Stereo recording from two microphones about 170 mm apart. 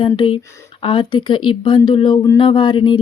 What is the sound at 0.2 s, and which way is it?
Speech, 30° left (ahead or behind).